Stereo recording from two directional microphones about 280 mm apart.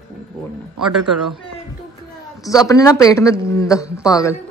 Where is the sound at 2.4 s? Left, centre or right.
Centre.